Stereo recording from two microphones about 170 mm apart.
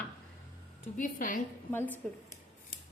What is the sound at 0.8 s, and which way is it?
Speech, 50° left (ahead or behind).